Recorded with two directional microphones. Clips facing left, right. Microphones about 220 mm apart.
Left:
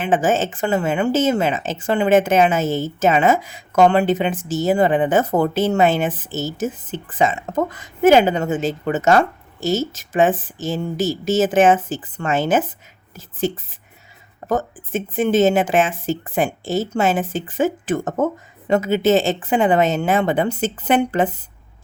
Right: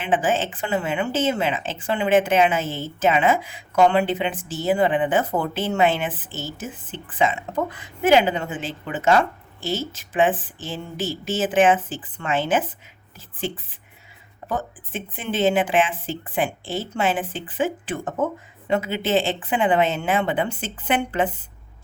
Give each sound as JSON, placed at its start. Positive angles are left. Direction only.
{"t": 0.0, "sound": "a woman's voice", "side_deg": 45}